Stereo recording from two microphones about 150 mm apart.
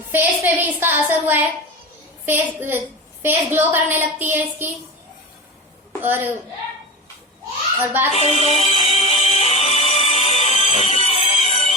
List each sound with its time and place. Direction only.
0.1 s a woman's voice: 15° right (ahead or behind)
6.0 s a child's voice: 15° right (ahead or behind)
8.1 s music: 45° left (ahead or behind)